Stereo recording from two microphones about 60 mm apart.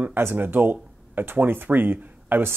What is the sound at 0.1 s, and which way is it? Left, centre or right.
Speech, right.